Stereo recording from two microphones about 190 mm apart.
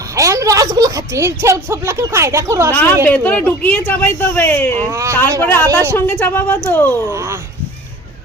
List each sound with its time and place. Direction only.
0.2 s a woman's voice: 15° right (ahead or behind)
2.7 s speech: 10° left (ahead or behind)
4.9 s a woman's voice: 15° right (ahead or behind)
5.4 s speech: 10° left (ahead or behind)